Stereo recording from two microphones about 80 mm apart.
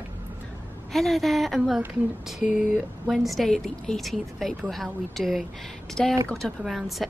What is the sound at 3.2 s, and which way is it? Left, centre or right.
Speech, centre.